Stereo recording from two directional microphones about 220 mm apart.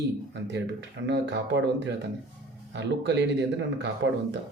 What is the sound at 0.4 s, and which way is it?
Speech, 50° right (ahead or behind).